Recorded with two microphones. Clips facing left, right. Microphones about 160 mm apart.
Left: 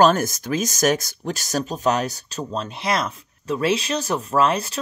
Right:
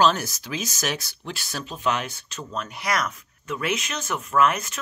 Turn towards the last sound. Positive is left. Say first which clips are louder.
# left 2 dB
turn(degrees=30)  # may be behind; listen again after turning